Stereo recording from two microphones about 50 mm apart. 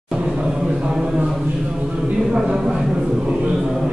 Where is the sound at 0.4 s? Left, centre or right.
Centre.